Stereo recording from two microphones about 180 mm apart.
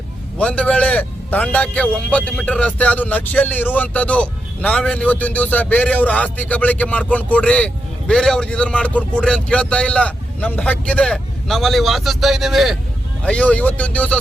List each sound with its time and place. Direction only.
0.3 s a man's voice: 5° left (ahead or behind)